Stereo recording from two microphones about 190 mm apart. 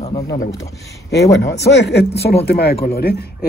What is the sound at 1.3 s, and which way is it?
Speech, 65° left (ahead or behind).